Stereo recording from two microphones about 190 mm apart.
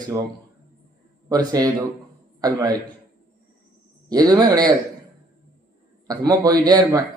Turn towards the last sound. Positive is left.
turn(degrees=-20)  # may be behind; listen again after turning